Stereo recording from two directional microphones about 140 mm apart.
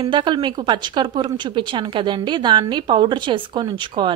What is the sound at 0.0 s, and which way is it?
A woman's voice, 35° right (ahead or behind).